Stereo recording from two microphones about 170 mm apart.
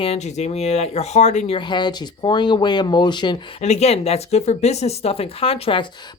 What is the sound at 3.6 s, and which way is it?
Speech, 40° left (ahead or behind).